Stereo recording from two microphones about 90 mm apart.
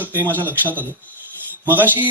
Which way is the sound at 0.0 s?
20° right (ahead or behind).